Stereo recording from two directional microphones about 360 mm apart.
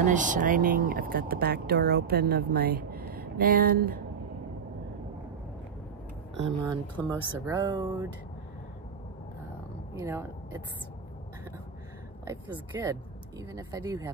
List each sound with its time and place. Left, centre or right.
0.0 s speech: right
6.4 s speech: centre
9.9 s speech: centre
12.3 s speech: centre